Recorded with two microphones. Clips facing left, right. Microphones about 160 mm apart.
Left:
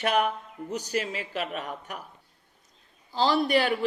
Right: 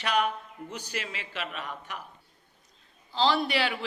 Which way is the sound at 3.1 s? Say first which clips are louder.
Left 2 dB; 45° left (ahead or behind).